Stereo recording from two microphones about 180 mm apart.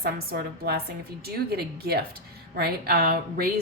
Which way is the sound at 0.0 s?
60° right (ahead or behind).